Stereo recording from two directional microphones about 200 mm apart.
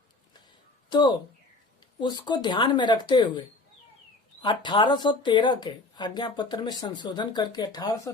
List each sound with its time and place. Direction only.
0.9 s a woman's voice: 20° left (ahead or behind)
4.4 s a woman's voice: 25° left (ahead or behind)